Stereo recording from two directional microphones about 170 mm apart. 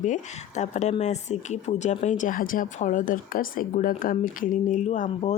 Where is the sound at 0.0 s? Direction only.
45° left (ahead or behind).